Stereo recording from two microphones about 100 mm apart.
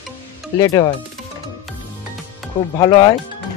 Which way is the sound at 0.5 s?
40° left (ahead or behind).